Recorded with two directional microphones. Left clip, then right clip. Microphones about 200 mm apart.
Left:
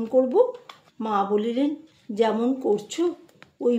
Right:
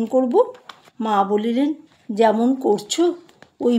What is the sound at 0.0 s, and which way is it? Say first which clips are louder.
Speech: right 2 dB; 45° right (ahead or behind).